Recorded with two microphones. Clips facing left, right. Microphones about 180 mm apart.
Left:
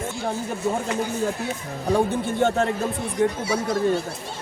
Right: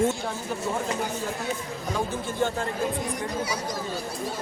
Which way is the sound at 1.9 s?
65° left (ahead or behind).